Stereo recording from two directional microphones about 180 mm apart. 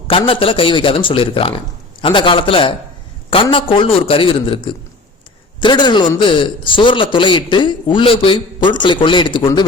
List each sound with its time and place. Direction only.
0.1 s a man's voice: 30° left (ahead or behind)